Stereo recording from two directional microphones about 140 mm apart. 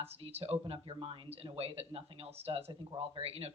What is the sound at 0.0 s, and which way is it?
Speech, 45° right (ahead or behind).